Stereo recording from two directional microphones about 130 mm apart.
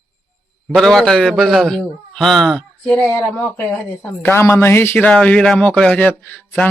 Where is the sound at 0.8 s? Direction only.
5° left (ahead or behind).